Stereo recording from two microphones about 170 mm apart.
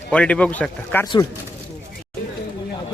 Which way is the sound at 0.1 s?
5° left (ahead or behind).